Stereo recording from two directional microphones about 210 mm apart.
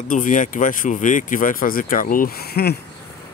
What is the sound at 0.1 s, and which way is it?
Speech, 35° left (ahead or behind).